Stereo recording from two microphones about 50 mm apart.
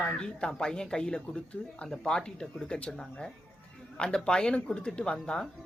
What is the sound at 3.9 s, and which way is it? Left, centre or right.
Speech, centre.